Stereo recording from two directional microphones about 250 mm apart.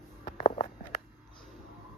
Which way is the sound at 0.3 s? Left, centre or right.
Left.